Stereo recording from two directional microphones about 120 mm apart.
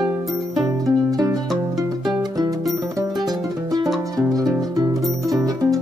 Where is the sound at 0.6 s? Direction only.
30° right (ahead or behind).